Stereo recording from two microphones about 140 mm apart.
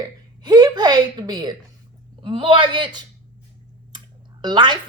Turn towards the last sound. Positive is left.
turn(degrees=-35)  # may be behind; listen again after turning